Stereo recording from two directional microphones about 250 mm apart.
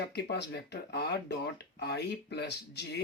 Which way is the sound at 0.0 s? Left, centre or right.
Left.